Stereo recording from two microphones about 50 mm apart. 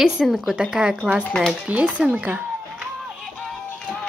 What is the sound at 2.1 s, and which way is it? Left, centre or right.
Speech, right.